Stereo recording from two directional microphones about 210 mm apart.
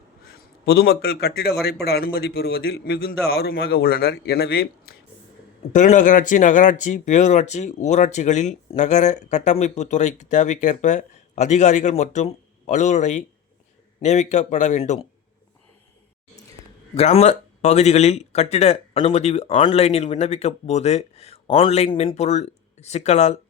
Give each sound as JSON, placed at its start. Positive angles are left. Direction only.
{"t": 0.6, "sound": "a man's voice", "side_deg": 50}
{"t": 5.7, "sound": "speech", "side_deg": 35}
{"t": 16.9, "sound": "speech", "side_deg": 30}